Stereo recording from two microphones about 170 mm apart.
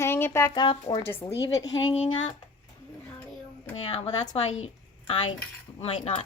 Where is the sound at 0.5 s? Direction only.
30° left (ahead or behind).